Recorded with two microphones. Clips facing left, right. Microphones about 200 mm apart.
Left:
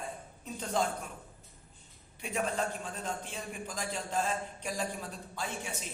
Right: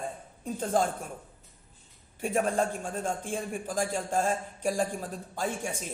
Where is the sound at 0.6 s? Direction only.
50° right (ahead or behind).